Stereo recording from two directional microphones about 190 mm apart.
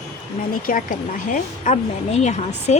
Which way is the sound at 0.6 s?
45° left (ahead or behind).